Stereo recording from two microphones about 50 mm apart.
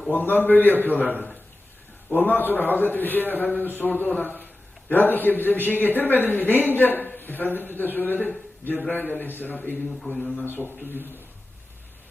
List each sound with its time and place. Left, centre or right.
0.1 s a man's voice: left
2.1 s a man's voice: left